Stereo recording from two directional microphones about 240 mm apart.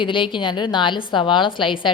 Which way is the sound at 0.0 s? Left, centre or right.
Centre.